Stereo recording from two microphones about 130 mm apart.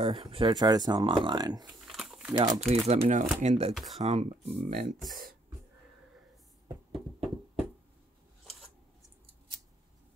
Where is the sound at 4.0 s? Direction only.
60° right (ahead or behind).